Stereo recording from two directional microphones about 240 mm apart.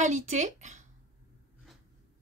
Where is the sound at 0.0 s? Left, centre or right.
Right.